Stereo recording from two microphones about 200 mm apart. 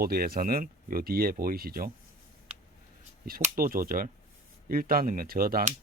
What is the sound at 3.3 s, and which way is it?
Speech, 45° right (ahead or behind).